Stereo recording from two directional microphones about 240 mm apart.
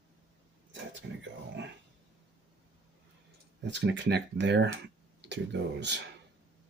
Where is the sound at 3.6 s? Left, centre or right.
Right.